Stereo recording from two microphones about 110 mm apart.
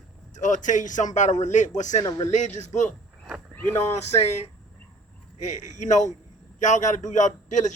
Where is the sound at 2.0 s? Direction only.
35° left (ahead or behind).